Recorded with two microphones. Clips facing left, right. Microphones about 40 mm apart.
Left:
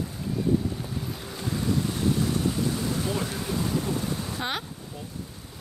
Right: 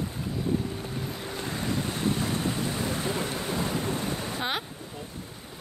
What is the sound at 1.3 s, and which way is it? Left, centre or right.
Boat, right.